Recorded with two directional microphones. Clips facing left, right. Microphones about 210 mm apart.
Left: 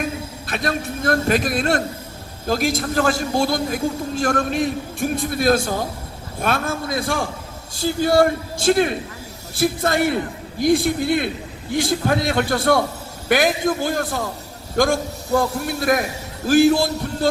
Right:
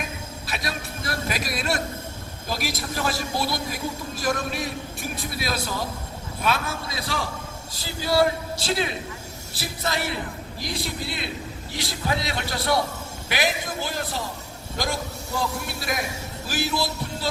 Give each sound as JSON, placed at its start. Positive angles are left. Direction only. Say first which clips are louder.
{"t": 0.4, "sound": "a man's voice", "louder": "left 8 dB", "side_deg": 50}
{"t": 15.4, "sound": "a man's voice", "louder": "left 7 dB", "side_deg": 50}